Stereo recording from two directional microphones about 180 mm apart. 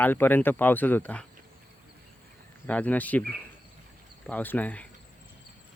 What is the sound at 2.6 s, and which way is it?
Speech, 10° left (ahead or behind).